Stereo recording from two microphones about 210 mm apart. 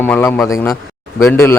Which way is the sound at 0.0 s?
10° left (ahead or behind).